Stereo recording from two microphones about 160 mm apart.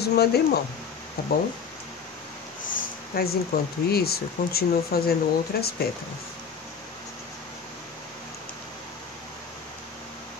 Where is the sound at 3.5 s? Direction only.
75° left (ahead or behind).